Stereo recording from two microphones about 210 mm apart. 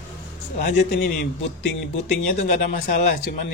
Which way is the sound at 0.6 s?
50° left (ahead or behind).